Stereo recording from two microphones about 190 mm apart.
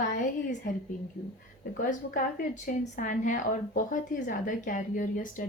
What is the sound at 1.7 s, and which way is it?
Speech, 45° left (ahead or behind).